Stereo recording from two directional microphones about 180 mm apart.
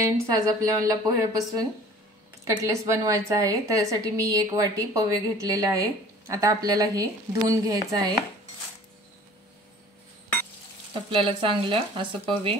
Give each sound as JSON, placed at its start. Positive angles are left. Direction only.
{"t": 0.0, "sound": "a woman's voice", "side_deg": -20}
{"t": 2.4, "sound": "a woman's voice", "side_deg": -15}
{"t": 10.9, "sound": "a woman's voice", "side_deg": -30}